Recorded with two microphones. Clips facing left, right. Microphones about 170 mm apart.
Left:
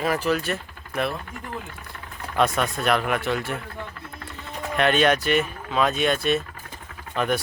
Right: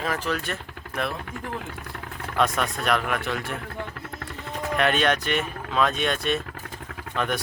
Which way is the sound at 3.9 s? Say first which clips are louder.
Right 3 dB; 70° right (ahead or behind).